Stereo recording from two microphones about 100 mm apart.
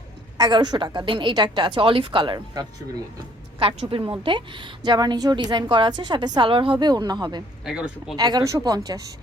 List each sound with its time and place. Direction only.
0.3 s a woman's voice: 45° right (ahead or behind)
3.6 s a woman's voice: 65° right (ahead or behind); by 7.4 s 45° right (ahead or behind)
7.6 s speech: 10° right (ahead or behind)
8.1 s a woman's voice: 45° right (ahead or behind)